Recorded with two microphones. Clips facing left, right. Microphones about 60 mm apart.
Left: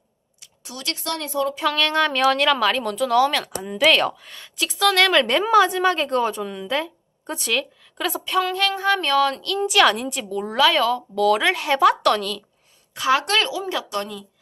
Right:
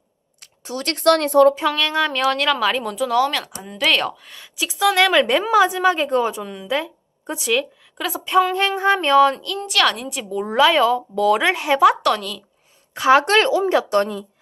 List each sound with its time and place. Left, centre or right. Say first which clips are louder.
0.6 s speech: right 6 dB; right
1.0 s speech: right 12 dB; right
1.7 s speech: even; centre
8.2 s a sound: right 5 dB; centre
9.3 s a woman's voice: left 1 dB; centre
9.6 s a woman's voice: left 5 dB; centre
12.9 s a woman's voice: right 6 dB; right